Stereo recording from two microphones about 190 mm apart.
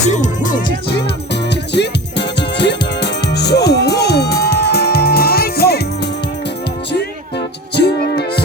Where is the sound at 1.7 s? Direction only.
65° left (ahead or behind).